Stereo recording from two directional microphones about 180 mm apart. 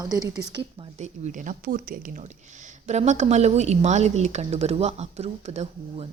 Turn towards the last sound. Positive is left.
turn(degrees=-35)  # may be behind; listen again after turning